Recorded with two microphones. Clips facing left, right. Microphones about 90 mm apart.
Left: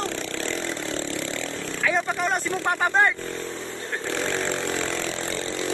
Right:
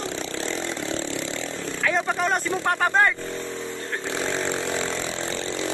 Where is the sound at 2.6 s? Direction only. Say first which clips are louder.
Even; 10° left (ahead or behind).